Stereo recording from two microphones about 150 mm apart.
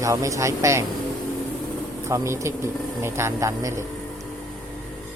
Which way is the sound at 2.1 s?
20° right (ahead or behind).